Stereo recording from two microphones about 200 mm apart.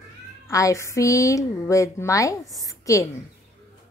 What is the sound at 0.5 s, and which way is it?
A woman's voice, 15° left (ahead or behind).